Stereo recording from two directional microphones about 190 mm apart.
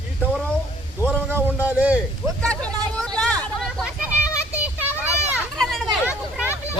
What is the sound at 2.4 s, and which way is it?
Vehicle, 5° left (ahead or behind).